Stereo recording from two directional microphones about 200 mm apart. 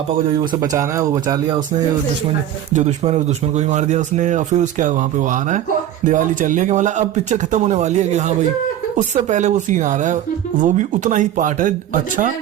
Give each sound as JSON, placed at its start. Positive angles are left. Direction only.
{"t": 0.3, "sound": "speech", "side_deg": -20}
{"t": 2.7, "sound": "speech", "side_deg": -35}